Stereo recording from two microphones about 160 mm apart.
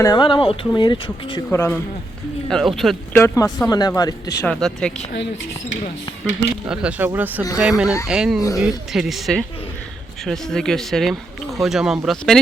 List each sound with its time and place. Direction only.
0.0 s speech: 25° left (ahead or behind)
1.5 s speech: 15° left (ahead or behind)
2.5 s speech: centre (ahead or behind)
3.1 s speech: 15° left (ahead or behind)
4.6 s speech: 5° left (ahead or behind)
6.7 s speech: 10° right (ahead or behind)
8.4 s speech: 20° left (ahead or behind)
8.6 s speech: centre (ahead or behind)